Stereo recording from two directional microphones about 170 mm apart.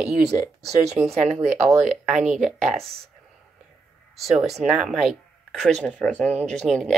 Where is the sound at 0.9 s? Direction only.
40° right (ahead or behind).